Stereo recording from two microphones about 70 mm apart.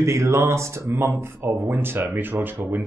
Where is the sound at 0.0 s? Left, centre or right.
Right.